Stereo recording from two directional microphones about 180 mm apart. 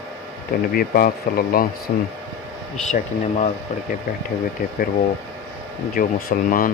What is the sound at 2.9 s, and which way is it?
Speech, 35° left (ahead or behind).